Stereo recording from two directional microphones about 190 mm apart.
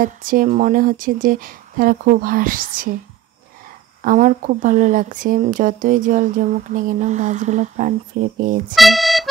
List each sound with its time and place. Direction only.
0.0 s speech: 45° right (ahead or behind)
4.0 s speech: 45° right (ahead or behind)
8.7 s accordion: centre (ahead or behind)